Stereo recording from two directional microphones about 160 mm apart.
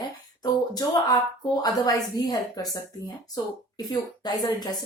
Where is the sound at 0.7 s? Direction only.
25° left (ahead or behind).